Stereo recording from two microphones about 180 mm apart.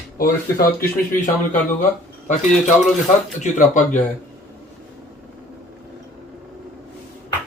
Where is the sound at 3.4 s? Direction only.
45° left (ahead or behind).